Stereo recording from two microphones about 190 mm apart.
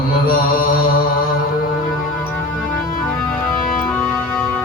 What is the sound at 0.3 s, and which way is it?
Mantra, 50° left (ahead or behind).